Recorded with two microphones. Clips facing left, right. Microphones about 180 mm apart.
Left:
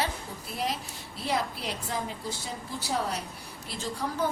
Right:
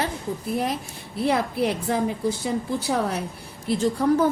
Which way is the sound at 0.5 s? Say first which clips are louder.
Right 2 dB; 55° right (ahead or behind).